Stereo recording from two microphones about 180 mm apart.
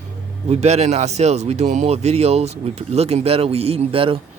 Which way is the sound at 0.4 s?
35° right (ahead or behind).